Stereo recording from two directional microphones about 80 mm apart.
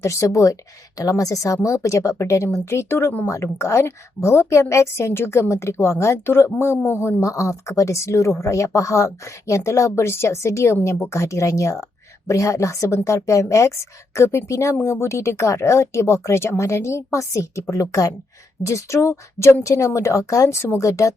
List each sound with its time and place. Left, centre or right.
0.0 s a woman's voice: left
7.2 s a woman's voice: left